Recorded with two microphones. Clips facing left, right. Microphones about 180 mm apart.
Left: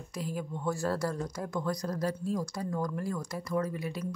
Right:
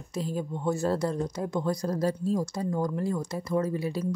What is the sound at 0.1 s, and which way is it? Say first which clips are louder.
Speech: right 5 dB; 25° right (ahead or behind).